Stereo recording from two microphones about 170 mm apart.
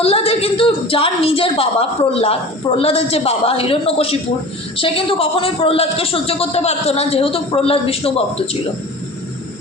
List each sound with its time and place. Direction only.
0.0 s a woman's voice: 35° left (ahead or behind)